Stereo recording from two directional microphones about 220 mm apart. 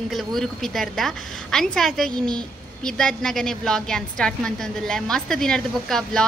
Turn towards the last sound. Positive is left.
turn(degrees=0)  # may be behind; listen again after turning